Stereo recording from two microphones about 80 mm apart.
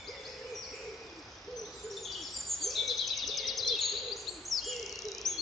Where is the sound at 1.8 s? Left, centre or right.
Centre.